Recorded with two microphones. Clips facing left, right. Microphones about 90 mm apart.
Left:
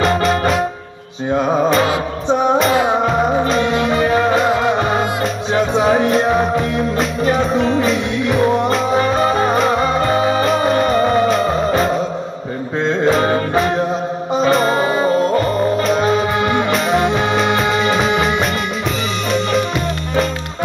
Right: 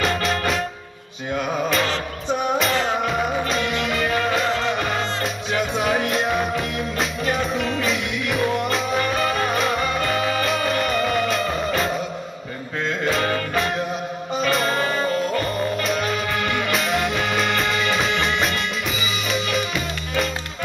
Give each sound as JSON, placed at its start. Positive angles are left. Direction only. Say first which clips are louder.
{"t": 1.3, "sound": "music", "louder": "left 8 dB", "side_deg": 35}
{"t": 2.7, "sound": "music", "louder": "left 7 dB", "side_deg": 15}
{"t": 3.0, "sound": "music", "louder": "left 7 dB", "side_deg": 35}